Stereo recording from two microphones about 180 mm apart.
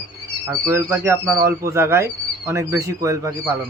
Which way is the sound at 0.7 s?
15° right (ahead or behind).